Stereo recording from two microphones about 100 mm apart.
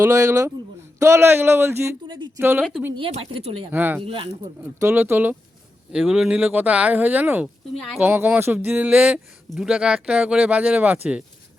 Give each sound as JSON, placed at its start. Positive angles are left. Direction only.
{"t": 0.0, "sound": "speech", "side_deg": -30}
{"t": 2.0, "sound": "speech", "side_deg": -50}
{"t": 2.4, "sound": "speech", "side_deg": -20}
{"t": 2.9, "sound": "speech", "side_deg": -60}
{"t": 3.7, "sound": "speech", "side_deg": -20}
{"t": 4.0, "sound": "speech", "side_deg": -60}
{"t": 4.8, "sound": "speech", "side_deg": -25}
{"t": 5.9, "sound": "speech", "side_deg": -10}
{"t": 7.4, "sound": "a woman's voice", "side_deg": 0}
{"t": 8.0, "sound": "speech", "side_deg": -20}